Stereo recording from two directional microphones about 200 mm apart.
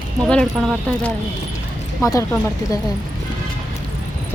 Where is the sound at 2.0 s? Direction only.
15° left (ahead or behind).